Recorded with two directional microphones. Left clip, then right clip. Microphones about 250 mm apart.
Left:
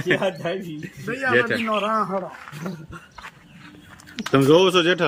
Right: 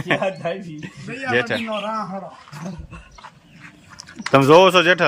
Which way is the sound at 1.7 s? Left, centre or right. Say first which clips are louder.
Left 3 dB; left.